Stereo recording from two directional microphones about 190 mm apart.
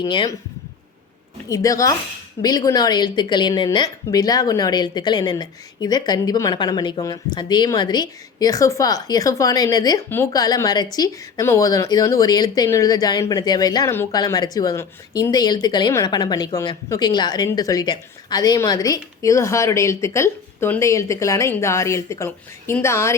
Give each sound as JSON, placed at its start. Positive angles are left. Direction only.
{"t": 0.0, "sound": "speech", "side_deg": 20}
{"t": 1.5, "sound": "speech", "side_deg": 20}